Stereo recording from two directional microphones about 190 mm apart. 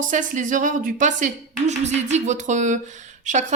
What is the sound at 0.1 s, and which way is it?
A woman's voice, 40° right (ahead or behind).